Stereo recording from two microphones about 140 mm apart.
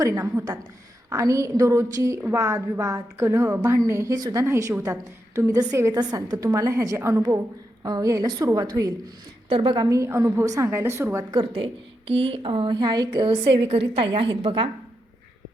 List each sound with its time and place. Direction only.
0.0 s a woman's voice: 25° right (ahead or behind)
9.5 s a woman's voice: 40° right (ahead or behind)
9.8 s a woman's voice: 20° right (ahead or behind)
11.3 s a woman's voice: 40° right (ahead or behind)